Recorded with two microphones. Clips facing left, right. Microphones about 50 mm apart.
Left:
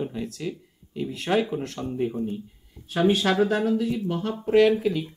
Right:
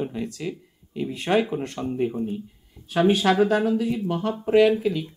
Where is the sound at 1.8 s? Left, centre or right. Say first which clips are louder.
Right 3 dB; centre.